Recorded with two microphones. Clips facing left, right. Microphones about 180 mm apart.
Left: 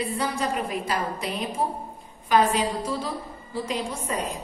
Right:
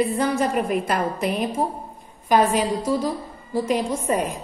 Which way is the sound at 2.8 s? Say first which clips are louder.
Right 6 dB; 45° right (ahead or behind).